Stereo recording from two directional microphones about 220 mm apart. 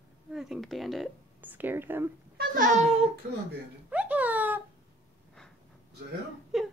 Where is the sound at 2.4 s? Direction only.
35° right (ahead or behind).